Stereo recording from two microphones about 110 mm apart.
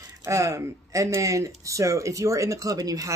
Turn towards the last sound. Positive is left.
turn(degrees=-35)  # may be behind; listen again after turning